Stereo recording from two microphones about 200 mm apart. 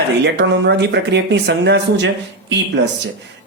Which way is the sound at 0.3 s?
60° right (ahead or behind).